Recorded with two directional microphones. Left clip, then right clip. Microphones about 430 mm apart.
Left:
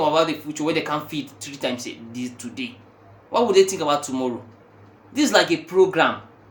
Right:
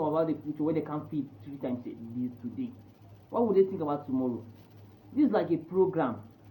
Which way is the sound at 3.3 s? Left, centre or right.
Left.